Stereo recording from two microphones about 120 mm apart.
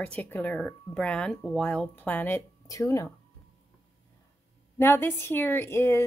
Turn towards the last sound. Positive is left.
turn(degrees=20)  # may be behind; listen again after turning